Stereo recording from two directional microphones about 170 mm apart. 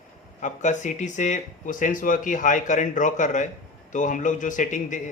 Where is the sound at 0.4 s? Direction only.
45° left (ahead or behind).